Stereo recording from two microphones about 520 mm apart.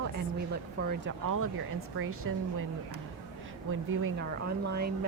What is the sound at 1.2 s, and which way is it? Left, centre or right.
Speech, right.